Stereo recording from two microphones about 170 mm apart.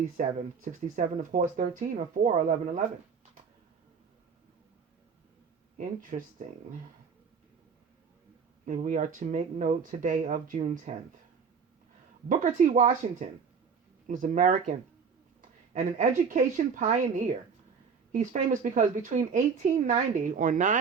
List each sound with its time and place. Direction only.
0.2 s speech: 45° right (ahead or behind)
5.7 s speech: 50° right (ahead or behind)
8.6 s speech: 50° right (ahead or behind)
12.3 s speech: 50° right (ahead or behind)